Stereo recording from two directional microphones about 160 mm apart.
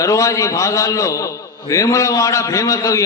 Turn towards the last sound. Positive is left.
turn(degrees=20)  # may be behind; listen again after turning